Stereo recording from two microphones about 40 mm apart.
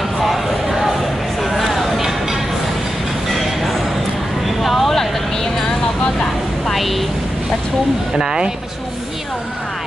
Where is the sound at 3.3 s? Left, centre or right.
Centre.